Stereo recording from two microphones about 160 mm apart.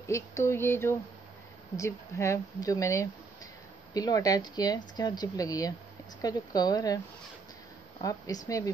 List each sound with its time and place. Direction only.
0.0 s a sound: 20° left (ahead or behind)
1.8 s speech: 15° left (ahead or behind)
8.0 s speech: 20° left (ahead or behind)